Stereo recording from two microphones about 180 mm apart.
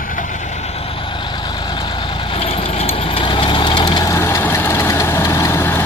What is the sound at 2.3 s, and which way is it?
Vehicle, 35° left (ahead or behind).